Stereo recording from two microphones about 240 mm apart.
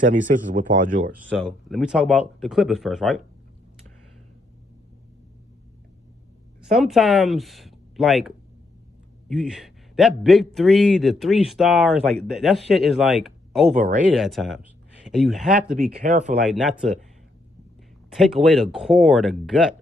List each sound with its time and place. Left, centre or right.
0.0 s speech: right
1.4 s a man's voice: centre
6.6 s speech: centre
9.3 s a man's voice: centre
15.8 s speech: right
16.4 s a man's voice: centre
18.1 s a man's voice: centre